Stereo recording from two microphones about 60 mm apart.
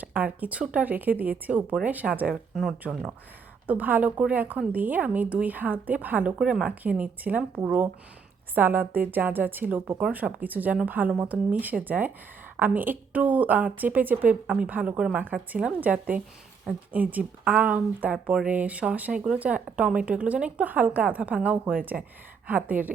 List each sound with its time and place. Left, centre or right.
0.0 s a woman's voice: right
2.3 s speech: centre
3.7 s a woman's voice: right
6.4 s a woman's voice: centre
7.0 s a woman's voice: right
14.9 s a woman's voice: centre
15.8 s a woman's voice: right